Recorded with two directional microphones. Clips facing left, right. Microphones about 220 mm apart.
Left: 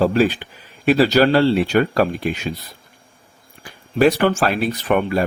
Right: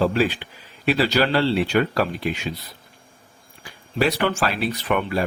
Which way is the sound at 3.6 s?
50° left (ahead or behind).